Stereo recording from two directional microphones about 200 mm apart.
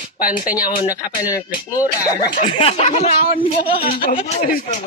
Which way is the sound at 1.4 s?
20° left (ahead or behind).